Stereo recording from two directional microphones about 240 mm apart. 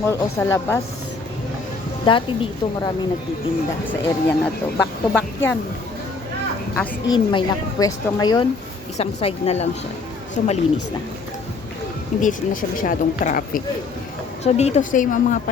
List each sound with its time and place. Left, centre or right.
0.1 s speech: centre
2.0 s a woman's voice: left
3.8 s speech: centre
6.7 s speech: centre
9.0 s a woman's voice: left
12.2 s speech: left